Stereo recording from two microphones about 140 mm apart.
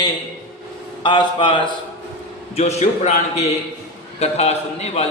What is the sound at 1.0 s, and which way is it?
Speech, 35° left (ahead or behind).